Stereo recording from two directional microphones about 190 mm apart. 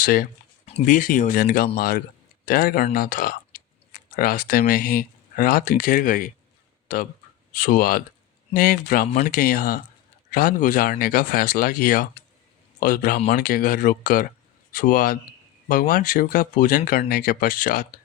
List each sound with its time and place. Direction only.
0.0 s speech: 50° left (ahead or behind)
0.6 s speech: 40° left (ahead or behind)